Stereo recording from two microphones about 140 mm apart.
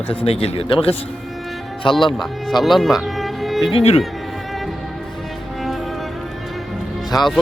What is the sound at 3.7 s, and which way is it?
Speech, 50° left (ahead or behind).